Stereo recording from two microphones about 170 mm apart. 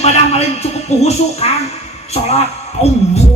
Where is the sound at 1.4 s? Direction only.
40° left (ahead or behind).